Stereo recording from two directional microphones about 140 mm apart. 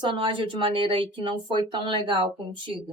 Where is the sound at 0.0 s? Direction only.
35° right (ahead or behind).